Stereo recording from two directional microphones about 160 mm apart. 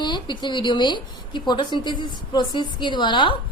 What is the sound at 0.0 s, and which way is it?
A woman's voice, 30° left (ahead or behind).